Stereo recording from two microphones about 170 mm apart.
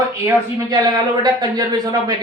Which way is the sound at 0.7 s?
25° right (ahead or behind).